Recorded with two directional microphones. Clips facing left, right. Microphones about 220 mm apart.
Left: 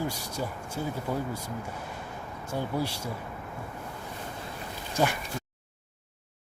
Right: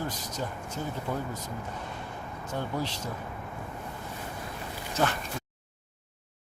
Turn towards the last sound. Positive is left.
turn(degrees=10)  # may be behind; listen again after turning